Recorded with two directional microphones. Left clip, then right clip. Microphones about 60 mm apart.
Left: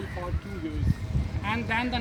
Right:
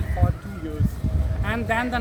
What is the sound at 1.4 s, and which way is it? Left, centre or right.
Speech, right.